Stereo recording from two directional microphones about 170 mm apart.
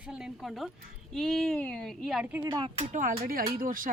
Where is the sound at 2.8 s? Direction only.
50° right (ahead or behind).